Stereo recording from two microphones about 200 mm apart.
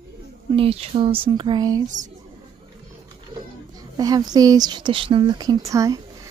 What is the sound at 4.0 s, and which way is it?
Speech, 20° right (ahead or behind).